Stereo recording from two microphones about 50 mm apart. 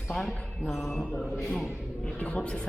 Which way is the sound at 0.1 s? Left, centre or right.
Centre.